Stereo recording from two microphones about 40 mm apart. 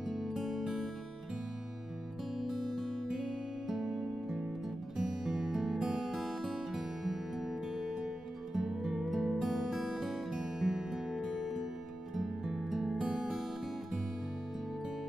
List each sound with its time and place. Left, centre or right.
0.0 s music: centre
2.3 s music: centre
3.1 s music: centre